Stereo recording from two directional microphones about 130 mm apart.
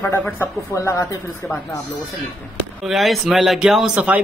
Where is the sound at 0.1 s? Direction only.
20° left (ahead or behind).